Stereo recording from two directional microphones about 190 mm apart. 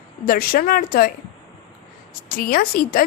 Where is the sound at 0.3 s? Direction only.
50° left (ahead or behind).